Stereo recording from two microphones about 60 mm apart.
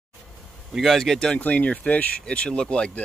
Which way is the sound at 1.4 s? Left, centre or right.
Left.